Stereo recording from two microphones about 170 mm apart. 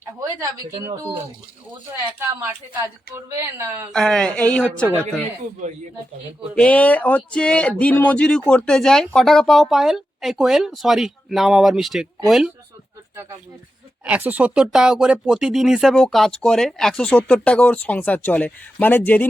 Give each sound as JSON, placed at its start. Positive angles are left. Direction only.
{"t": 0.0, "sound": "speech", "side_deg": -15}
{"t": 2.1, "sound": "a woman's voice", "side_deg": -15}
{"t": 3.9, "sound": "speech", "side_deg": 5}
{"t": 6.5, "sound": "speech", "side_deg": 5}
{"t": 14.0, "sound": "speech", "side_deg": -10}